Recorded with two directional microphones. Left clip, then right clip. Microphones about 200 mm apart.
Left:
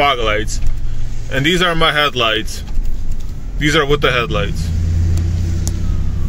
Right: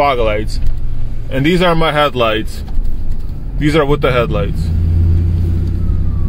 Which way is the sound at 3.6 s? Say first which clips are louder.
Right 1 dB; 5° right (ahead or behind).